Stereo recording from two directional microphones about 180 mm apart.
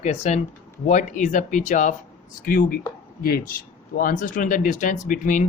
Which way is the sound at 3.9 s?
45° left (ahead or behind).